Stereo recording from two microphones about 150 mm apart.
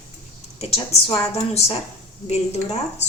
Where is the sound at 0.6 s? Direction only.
40° left (ahead or behind).